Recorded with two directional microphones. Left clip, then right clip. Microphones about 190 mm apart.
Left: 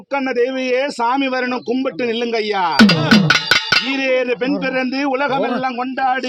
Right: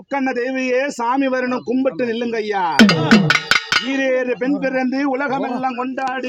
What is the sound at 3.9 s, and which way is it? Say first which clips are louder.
A man's voice: left 1 dB; 10° right (ahead or behind).